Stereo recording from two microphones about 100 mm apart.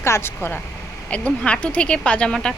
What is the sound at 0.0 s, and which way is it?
Speech, 25° left (ahead or behind).